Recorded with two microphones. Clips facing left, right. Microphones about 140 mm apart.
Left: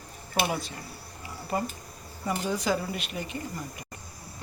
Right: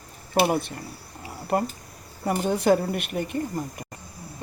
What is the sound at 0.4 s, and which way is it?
Speech, 55° right (ahead or behind).